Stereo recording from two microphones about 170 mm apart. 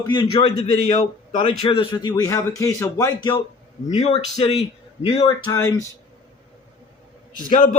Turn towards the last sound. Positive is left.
turn(degrees=50)  # may be behind; listen again after turning